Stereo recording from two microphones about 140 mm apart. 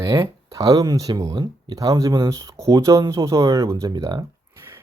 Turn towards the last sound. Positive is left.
turn(degrees=-30)  # may be behind; listen again after turning